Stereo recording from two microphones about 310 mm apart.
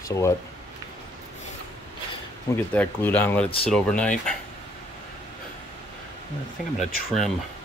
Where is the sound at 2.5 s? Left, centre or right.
Centre.